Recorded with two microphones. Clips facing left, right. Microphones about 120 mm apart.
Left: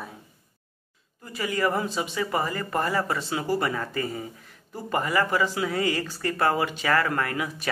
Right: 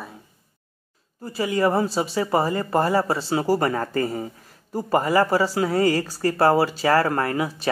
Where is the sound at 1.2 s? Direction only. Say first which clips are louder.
Right 5 dB; 30° right (ahead or behind).